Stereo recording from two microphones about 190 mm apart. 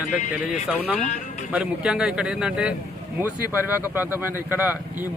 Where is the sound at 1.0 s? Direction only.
35° left (ahead or behind).